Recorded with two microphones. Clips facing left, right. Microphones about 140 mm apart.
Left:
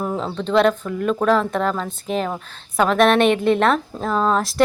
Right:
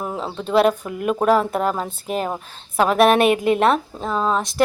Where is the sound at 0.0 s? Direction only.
5° right (ahead or behind).